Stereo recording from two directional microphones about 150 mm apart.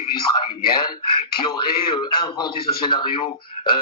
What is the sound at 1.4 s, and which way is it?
A man's voice, 30° left (ahead or behind).